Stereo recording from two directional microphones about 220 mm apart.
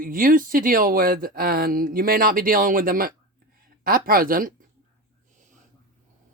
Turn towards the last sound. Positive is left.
turn(degrees=-40)  # may be behind; listen again after turning